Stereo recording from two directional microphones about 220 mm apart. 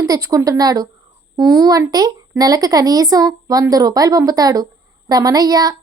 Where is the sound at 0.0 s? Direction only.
15° right (ahead or behind).